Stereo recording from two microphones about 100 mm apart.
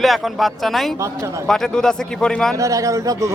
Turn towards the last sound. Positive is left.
turn(degrees=-30)  # may be behind; listen again after turning